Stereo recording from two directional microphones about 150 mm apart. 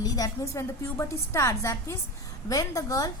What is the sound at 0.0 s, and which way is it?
A woman's voice, 20° left (ahead or behind).